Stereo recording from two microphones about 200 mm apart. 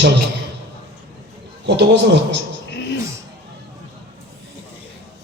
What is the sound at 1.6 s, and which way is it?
Speech, 60° right (ahead or behind).